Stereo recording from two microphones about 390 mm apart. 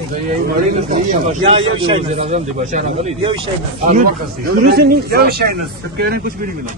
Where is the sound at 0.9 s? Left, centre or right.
Centre.